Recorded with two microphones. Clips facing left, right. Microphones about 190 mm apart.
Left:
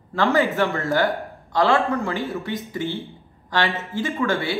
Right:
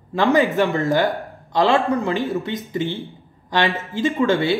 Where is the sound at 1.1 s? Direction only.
15° right (ahead or behind).